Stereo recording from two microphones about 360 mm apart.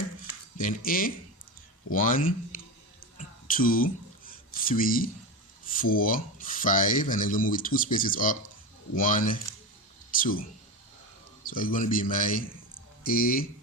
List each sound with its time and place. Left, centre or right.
0.5 s speech: left
3.4 s speech: left
11.4 s speech: left